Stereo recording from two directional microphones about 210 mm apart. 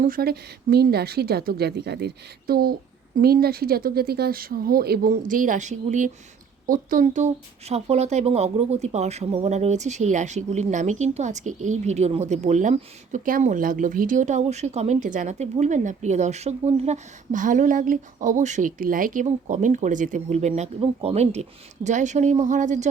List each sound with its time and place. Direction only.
0.0 s speech: 45° right (ahead or behind)